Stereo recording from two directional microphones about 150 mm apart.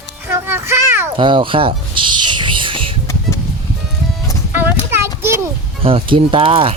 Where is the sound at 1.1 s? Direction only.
35° right (ahead or behind).